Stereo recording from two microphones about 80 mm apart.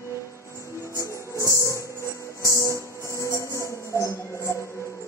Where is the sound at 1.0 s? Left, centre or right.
Left.